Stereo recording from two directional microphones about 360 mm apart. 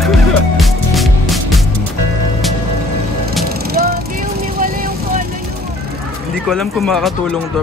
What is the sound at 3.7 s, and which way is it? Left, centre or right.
Vehicle, right.